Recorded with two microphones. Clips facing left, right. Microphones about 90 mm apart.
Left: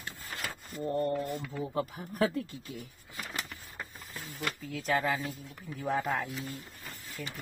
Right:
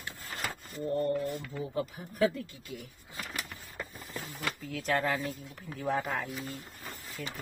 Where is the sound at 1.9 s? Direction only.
45° left (ahead or behind).